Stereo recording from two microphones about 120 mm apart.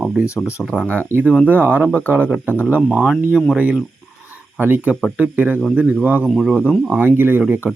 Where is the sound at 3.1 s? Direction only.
5° left (ahead or behind).